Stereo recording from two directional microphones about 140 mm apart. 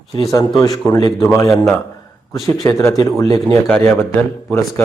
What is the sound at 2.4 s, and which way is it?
Speech, 25° left (ahead or behind).